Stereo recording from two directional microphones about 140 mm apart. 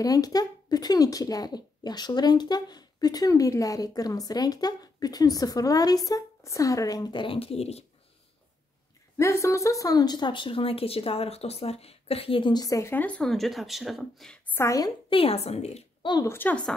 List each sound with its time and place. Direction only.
0.0 s speech: 25° left (ahead or behind); by 7.8 s 45° left (ahead or behind)
9.2 s speech: 20° left (ahead or behind); by 14.4 s centre (ahead or behind)
14.5 s speech: 20° left (ahead or behind)
15.0 s a woman's voice: 40° left (ahead or behind)
16.3 s a woman's voice: 15° left (ahead or behind)